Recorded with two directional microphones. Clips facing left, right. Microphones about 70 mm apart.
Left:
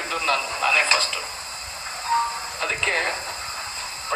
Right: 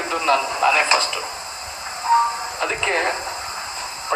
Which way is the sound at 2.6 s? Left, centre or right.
Right.